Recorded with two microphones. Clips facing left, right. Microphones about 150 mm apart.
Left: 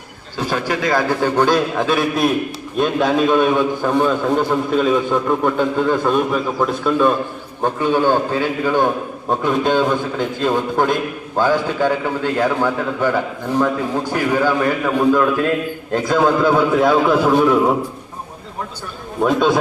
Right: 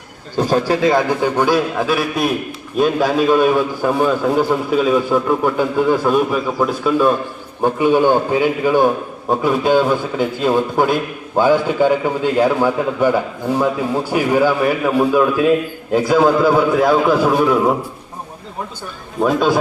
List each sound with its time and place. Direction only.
0.3 s a man's voice: 40° right (ahead or behind); by 1.3 s 25° right (ahead or behind)
1.4 s a man's voice: 10° right (ahead or behind)
19.2 s a man's voice: 5° right (ahead or behind)